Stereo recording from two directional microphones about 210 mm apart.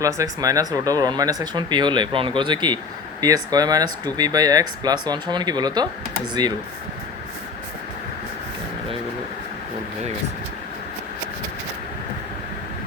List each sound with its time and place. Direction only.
0.0 s speech: 15° right (ahead or behind)